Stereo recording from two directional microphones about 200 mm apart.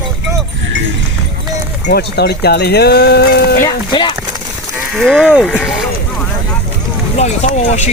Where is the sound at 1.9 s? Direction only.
55° left (ahead or behind).